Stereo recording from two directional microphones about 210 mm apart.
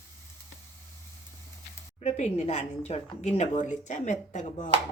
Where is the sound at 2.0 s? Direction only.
30° left (ahead or behind).